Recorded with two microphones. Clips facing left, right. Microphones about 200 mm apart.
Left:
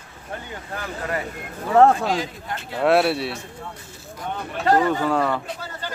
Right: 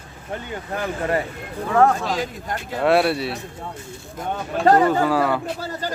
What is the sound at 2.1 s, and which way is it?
Speech, 45° right (ahead or behind).